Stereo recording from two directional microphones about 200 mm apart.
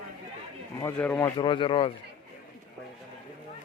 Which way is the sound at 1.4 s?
25° left (ahead or behind).